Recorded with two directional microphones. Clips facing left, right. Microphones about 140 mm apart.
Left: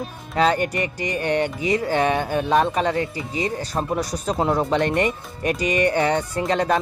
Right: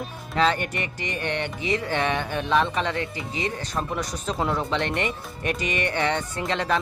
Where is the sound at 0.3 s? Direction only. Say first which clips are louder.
Left 4 dB; 40° left (ahead or behind).